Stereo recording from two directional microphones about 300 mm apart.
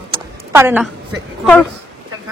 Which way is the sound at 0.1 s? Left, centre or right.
Centre.